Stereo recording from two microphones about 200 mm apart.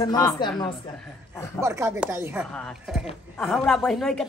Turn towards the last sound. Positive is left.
turn(degrees=0)  # may be behind; listen again after turning